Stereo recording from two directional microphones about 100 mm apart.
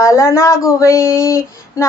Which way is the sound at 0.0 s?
30° left (ahead or behind).